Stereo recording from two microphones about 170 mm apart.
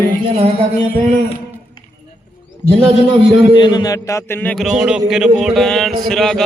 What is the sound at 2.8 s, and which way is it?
Speech, 30° right (ahead or behind).